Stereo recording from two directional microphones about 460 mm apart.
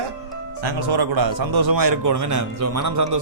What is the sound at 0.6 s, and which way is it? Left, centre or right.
A man's voice, right.